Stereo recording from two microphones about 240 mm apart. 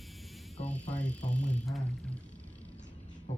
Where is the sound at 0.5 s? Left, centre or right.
Left.